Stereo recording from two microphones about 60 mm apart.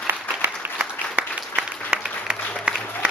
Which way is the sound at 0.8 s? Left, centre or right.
Centre.